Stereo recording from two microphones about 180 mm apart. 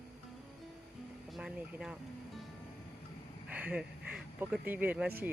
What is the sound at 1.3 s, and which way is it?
Speech, 5° right (ahead or behind).